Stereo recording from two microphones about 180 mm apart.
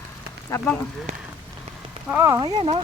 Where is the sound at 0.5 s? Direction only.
15° left (ahead or behind).